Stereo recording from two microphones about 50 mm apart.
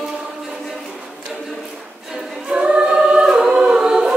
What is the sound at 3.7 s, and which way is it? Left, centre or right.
A capella, centre.